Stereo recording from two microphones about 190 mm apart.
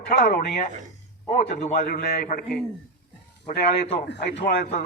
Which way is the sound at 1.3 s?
40° left (ahead or behind).